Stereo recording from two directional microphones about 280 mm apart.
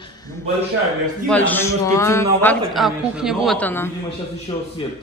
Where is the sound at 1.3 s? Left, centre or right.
Centre.